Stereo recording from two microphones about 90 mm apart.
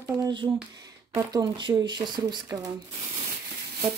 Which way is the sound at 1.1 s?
50° right (ahead or behind).